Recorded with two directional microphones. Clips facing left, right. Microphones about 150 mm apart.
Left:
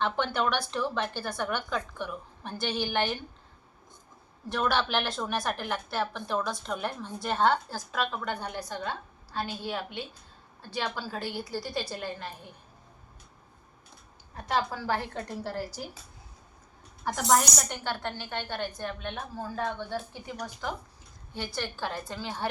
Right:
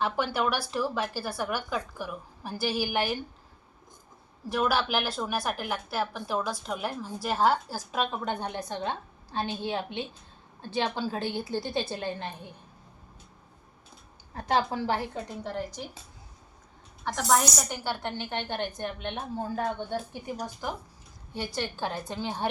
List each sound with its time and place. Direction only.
0.0 s a woman's voice: 5° right (ahead or behind)
4.4 s a woman's voice: 5° right (ahead or behind); by 12.3 s 25° right (ahead or behind)
14.3 s a woman's voice: 30° right (ahead or behind)
14.8 s a woman's voice: 15° right (ahead or behind)
15.3 s a woman's voice: 5° left (ahead or behind)
17.0 s a woman's voice: 5° left (ahead or behind); by 19.5 s 20° right (ahead or behind)
20.6 s a woman's voice: 15° right (ahead or behind)